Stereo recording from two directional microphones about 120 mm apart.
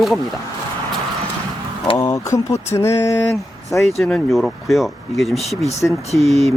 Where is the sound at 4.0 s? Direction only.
5° left (ahead or behind).